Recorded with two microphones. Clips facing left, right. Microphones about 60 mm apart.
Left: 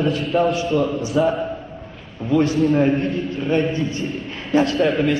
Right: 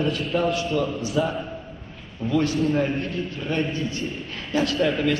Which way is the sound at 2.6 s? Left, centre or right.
Centre.